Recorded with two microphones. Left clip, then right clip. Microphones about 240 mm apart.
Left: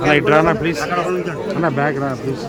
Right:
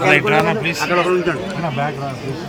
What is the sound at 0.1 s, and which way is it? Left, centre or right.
Speech, centre.